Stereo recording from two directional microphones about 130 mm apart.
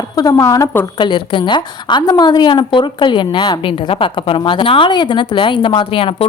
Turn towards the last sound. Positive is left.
turn(degrees=45)  # may be behind; listen again after turning